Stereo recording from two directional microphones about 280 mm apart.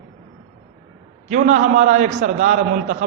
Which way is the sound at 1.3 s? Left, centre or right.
Right.